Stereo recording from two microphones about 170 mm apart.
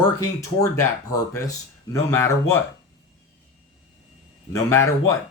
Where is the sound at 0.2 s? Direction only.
15° left (ahead or behind).